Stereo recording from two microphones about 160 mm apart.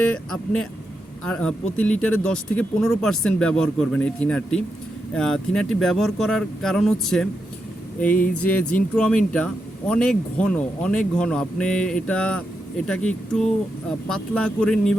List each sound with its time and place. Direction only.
0.1 s speech: 5° left (ahead or behind)
8.1 s speech: 60° left (ahead or behind)
9.0 s speech: 5° left (ahead or behind)